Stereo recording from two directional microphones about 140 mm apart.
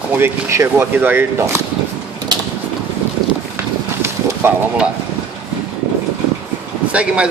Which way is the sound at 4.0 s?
10° right (ahead or behind).